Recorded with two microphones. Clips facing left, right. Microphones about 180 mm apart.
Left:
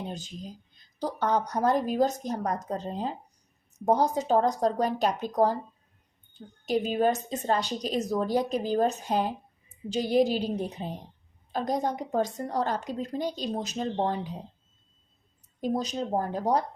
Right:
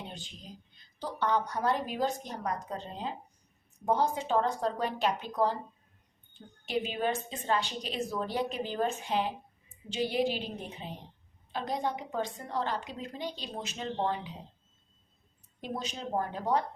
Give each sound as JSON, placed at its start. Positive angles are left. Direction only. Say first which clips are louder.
{"t": 0.1, "sound": "a woman's voice", "louder": "left 8 dB", "side_deg": 40}
{"t": 6.7, "sound": "a woman's voice", "louder": "left 6 dB", "side_deg": 45}
{"t": 15.6, "sound": "a woman's voice", "louder": "left 8 dB", "side_deg": 40}